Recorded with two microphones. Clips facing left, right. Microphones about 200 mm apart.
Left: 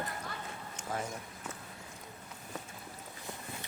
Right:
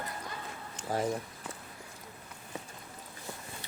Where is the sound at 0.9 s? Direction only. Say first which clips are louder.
Right 6 dB; 35° right (ahead or behind).